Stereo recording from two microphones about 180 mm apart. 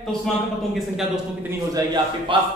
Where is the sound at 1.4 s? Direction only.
20° right (ahead or behind).